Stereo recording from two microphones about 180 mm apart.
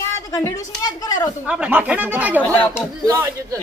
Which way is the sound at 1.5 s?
10° right (ahead or behind).